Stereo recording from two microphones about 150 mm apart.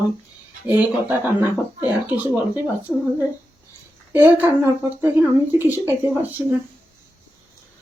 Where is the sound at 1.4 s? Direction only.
10° right (ahead or behind).